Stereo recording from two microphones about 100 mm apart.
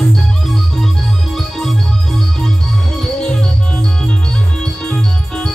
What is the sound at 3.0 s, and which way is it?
Music, 5° left (ahead or behind).